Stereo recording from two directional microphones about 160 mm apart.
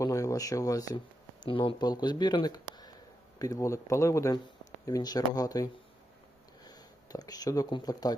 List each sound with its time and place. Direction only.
0.0 s a sound: 20° left (ahead or behind)
1.5 s speech: 35° left (ahead or behind)
6.7 s speech: 25° left (ahead or behind)